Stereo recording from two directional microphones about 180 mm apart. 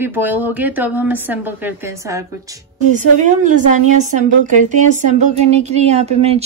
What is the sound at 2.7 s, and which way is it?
A woman's voice, 45° right (ahead or behind).